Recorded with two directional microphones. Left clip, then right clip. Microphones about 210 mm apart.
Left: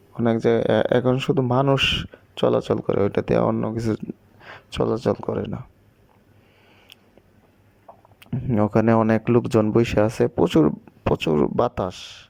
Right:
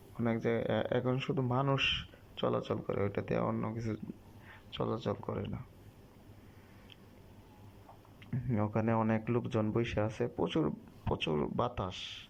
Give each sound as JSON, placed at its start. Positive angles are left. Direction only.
{"t": 0.2, "sound": "speech", "side_deg": 50}
{"t": 8.2, "sound": "speech", "side_deg": 50}